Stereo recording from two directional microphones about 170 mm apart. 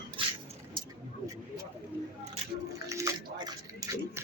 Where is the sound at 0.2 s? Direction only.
30° right (ahead or behind).